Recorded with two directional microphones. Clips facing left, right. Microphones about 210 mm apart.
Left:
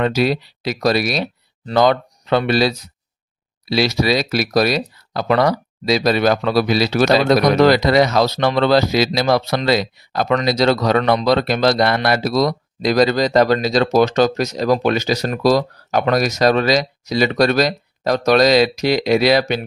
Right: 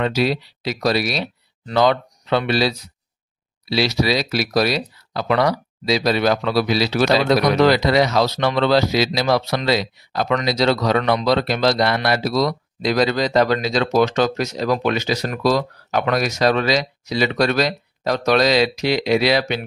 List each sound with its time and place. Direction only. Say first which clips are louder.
0.0 s speech: left 2 dB; 50° left (ahead or behind)